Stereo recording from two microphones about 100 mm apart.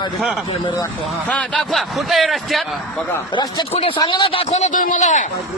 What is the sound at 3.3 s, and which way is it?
Speech, 50° left (ahead or behind).